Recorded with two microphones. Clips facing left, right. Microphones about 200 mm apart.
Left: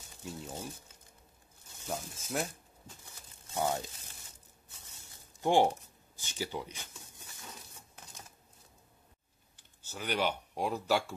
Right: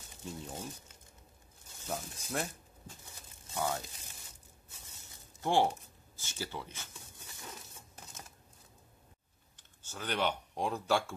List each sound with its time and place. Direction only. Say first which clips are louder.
0.2 s speech: left 1 dB; 5° left (ahead or behind)
1.9 s speech: left 1 dB; centre (ahead or behind)
3.5 s speech: left 3 dB; 20° left (ahead or behind)
5.4 s speech: left 3 dB; 15° left (ahead or behind)
9.6 s speech: left 1 dB; 10° left (ahead or behind)